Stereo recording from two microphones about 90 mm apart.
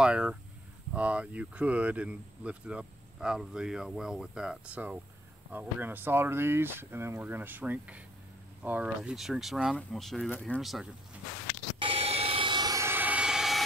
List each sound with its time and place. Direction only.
0.0 s speech: 10° right (ahead or behind)
11.8 s vehicle: 90° right; by 12.6 s 70° right (ahead or behind)
12.8 s vehicle: 20° right (ahead or behind); by 13.7 s 5° right (ahead or behind)